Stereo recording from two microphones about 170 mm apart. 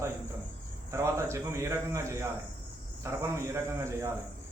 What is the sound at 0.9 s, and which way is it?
A man's voice, 15° right (ahead or behind).